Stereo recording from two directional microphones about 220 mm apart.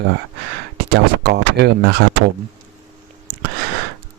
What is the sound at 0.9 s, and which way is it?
Speech, 50° right (ahead or behind).